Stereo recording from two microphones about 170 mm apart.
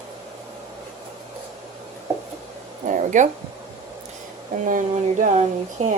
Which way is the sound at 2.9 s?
45° right (ahead or behind).